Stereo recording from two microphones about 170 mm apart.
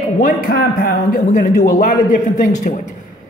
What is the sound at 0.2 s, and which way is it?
Speech, 55° left (ahead or behind).